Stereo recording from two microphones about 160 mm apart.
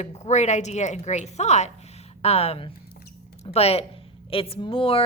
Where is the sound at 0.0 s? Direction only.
45° left (ahead or behind).